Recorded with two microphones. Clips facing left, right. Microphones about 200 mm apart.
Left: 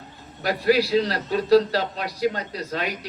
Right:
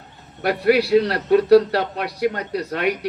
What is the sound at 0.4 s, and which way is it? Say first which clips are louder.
A man's voice: right 3 dB; 60° right (ahead or behind).